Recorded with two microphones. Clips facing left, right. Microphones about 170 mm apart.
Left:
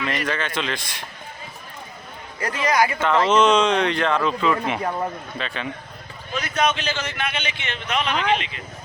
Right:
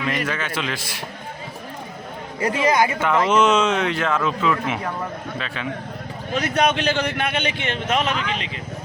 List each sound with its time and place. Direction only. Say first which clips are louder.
0.3 s a man's voice: even; 5° right (ahead or behind)
2.4 s speech: right 2 dB; 25° right (ahead or behind)
3.0 s speech: even; 10° right (ahead or behind)
6.3 s a man's voice: right 3 dB; 60° right (ahead or behind); by 8.4 s 40° right (ahead or behind)